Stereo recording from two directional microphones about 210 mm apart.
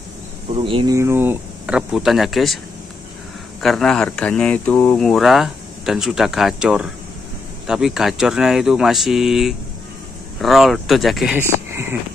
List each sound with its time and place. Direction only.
0.5 s speech: 25° right (ahead or behind)
0.9 s speech: 10° right (ahead or behind)
3.6 s speech: centre (ahead or behind)